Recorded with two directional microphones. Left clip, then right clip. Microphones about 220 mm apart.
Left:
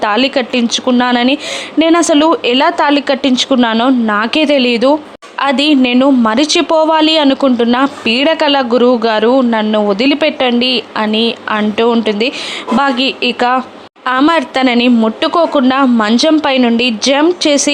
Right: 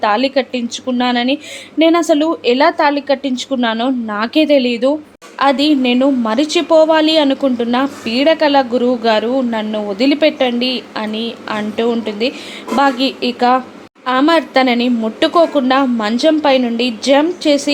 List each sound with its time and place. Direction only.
0.0 s a woman's voice: 20° left (ahead or behind)